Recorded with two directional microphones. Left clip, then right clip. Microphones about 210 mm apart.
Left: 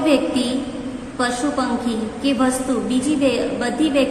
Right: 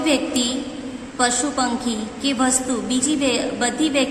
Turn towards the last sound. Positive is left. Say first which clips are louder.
# left 1 dB
turn(degrees=-20)  # may be behind; listen again after turning